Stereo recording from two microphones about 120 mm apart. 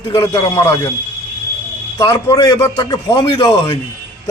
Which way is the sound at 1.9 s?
30° left (ahead or behind).